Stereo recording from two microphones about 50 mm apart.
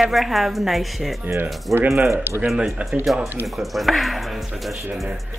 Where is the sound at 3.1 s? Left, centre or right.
Right.